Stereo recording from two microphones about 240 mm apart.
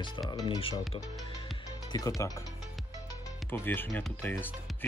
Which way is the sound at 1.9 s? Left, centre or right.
Centre.